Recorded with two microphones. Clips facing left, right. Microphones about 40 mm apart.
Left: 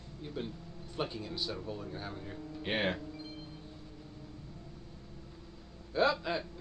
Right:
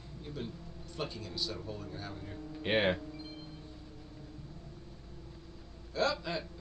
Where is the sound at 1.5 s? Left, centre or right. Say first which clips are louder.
Left 2 dB; centre.